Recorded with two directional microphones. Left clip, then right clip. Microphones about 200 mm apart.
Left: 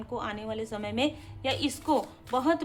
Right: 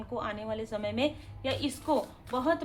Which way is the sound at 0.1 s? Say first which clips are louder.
Even; 20° left (ahead or behind).